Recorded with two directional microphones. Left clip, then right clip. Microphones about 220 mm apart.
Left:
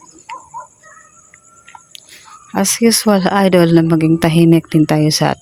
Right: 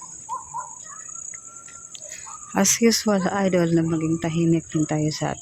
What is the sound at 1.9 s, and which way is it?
Speech, 25° left (ahead or behind).